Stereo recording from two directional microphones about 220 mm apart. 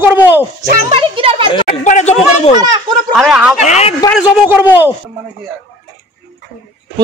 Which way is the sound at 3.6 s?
30° left (ahead or behind).